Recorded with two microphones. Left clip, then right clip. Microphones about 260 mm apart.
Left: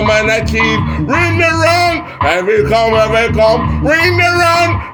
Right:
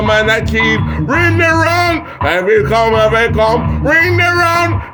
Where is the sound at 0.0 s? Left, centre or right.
Right.